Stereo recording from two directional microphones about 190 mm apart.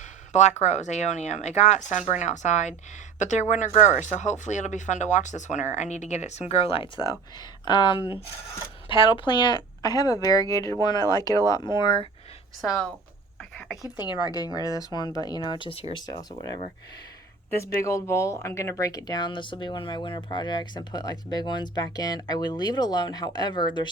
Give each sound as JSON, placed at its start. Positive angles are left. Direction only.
{"t": 0.0, "sound": "speech", "side_deg": 35}
{"t": 12.6, "sound": "speech", "side_deg": 0}
{"t": 13.4, "sound": "a sound", "side_deg": 5}
{"t": 14.0, "sound": "speech", "side_deg": 20}